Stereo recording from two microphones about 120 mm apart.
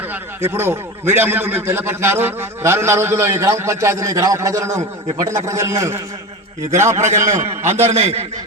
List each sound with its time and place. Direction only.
0.1 s a man's voice: 20° right (ahead or behind)
6.9 s a man's voice: 75° right (ahead or behind)
7.2 s a man's voice: 25° right (ahead or behind)
7.8 s a man's voice: 60° right (ahead or behind)